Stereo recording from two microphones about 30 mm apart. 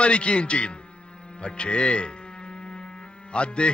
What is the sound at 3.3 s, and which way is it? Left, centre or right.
Speech, left.